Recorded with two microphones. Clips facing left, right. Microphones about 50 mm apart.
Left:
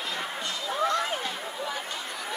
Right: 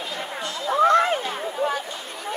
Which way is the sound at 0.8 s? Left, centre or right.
Right.